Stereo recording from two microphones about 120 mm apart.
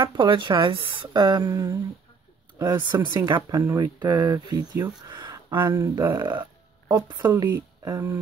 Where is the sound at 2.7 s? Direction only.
40° right (ahead or behind).